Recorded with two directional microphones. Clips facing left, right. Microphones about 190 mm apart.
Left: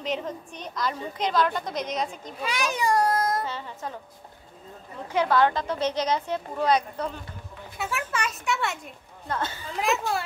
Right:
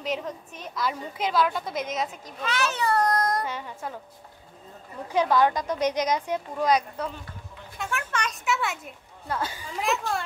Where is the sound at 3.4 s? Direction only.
10° right (ahead or behind).